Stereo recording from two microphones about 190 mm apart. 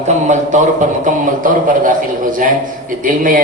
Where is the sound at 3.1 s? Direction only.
45° right (ahead or behind).